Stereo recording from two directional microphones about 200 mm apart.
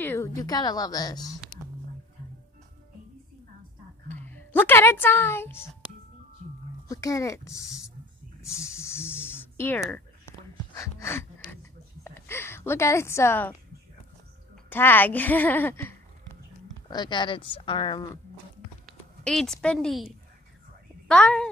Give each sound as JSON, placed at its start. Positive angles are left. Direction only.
{"t": 0.0, "sound": "a woman's voice", "side_deg": 10}
{"t": 1.5, "sound": "a sound", "side_deg": 20}
{"t": 4.1, "sound": "a woman's voice", "side_deg": 10}
{"t": 6.9, "sound": "speech", "side_deg": 15}
{"t": 8.4, "sound": "a sound", "side_deg": 15}
{"t": 12.0, "sound": "a woman's voice", "side_deg": 10}
{"t": 16.9, "sound": "a woman's voice", "side_deg": 20}
{"t": 18.9, "sound": "speech", "side_deg": 0}